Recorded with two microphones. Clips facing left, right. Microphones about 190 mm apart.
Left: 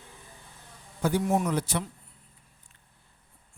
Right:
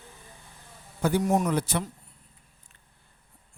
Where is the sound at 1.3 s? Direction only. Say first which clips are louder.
Right 2 dB; 40° right (ahead or behind).